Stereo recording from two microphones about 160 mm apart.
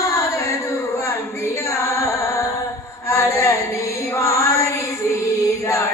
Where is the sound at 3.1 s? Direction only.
20° left (ahead or behind).